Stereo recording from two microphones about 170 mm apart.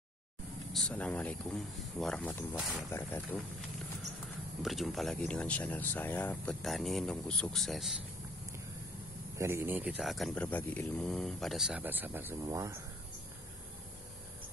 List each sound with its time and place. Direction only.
0.7 s speech: 5° left (ahead or behind)
2.9 s speech: 10° left (ahead or behind)
4.6 s speech: centre (ahead or behind)
9.4 s speech: 15° right (ahead or behind)